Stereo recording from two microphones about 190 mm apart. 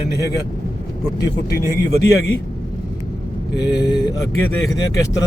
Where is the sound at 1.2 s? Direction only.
20° left (ahead or behind).